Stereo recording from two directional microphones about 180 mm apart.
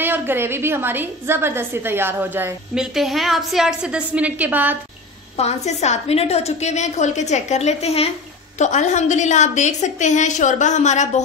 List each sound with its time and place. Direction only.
0.0 s a woman's voice: 10° right (ahead or behind)
5.4 s a woman's voice: 40° left (ahead or behind)